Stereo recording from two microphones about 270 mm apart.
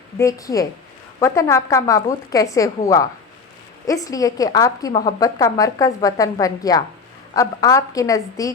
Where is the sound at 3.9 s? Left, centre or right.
Centre.